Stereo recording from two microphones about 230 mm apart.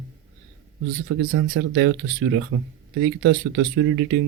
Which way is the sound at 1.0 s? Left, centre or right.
Right.